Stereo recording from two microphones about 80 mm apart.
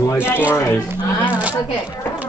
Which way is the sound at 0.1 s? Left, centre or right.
Left.